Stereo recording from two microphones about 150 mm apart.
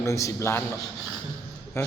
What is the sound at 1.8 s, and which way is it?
Speech, 15° left (ahead or behind).